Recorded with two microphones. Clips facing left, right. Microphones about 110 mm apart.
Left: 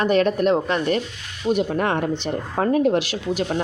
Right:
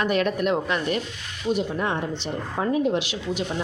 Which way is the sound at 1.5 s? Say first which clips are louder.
Left 4 dB; 60° left (ahead or behind).